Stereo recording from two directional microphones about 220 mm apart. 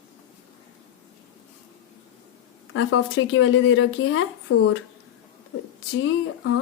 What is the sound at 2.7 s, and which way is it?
Speech, 65° left (ahead or behind).